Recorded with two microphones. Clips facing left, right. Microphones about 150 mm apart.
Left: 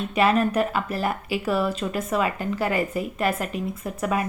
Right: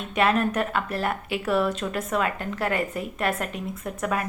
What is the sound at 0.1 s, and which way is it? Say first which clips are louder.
Speech: left 1 dB; centre (ahead or behind).